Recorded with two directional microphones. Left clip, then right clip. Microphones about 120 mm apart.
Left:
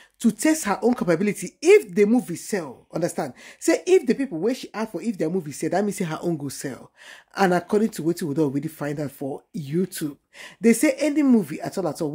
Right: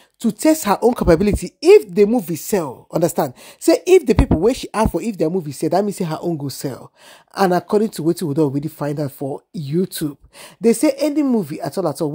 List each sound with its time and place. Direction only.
0.2 s speech: 30° right (ahead or behind)
2.1 s speech: 50° right (ahead or behind)
3.6 s speech: 45° right (ahead or behind); by 5.1 s 65° right (ahead or behind)
5.3 s speech: 35° right (ahead or behind)